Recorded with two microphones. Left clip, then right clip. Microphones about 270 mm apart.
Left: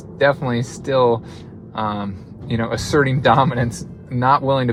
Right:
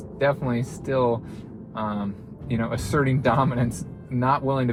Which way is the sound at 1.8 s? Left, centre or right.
Left.